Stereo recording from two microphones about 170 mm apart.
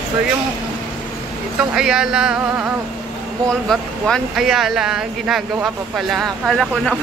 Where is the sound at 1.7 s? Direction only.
5° right (ahead or behind).